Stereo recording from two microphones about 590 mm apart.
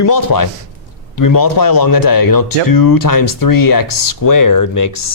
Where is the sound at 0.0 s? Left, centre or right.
Left.